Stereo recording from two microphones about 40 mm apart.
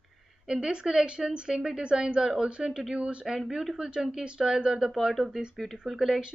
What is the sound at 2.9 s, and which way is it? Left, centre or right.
Speech, right.